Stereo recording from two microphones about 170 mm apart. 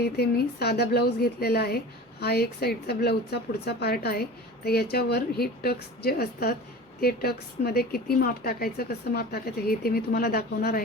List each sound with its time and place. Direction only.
0.0 s speech: 70° left (ahead or behind)